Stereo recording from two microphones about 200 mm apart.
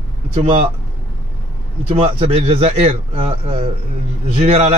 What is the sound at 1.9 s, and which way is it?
Speech, 30° right (ahead or behind).